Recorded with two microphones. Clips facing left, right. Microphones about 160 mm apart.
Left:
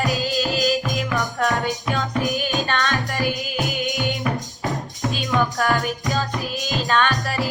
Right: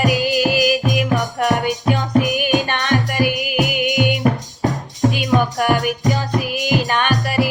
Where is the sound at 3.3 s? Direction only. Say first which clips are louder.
Right 6 dB; 65° right (ahead or behind).